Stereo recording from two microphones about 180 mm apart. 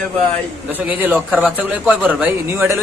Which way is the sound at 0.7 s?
10° right (ahead or behind).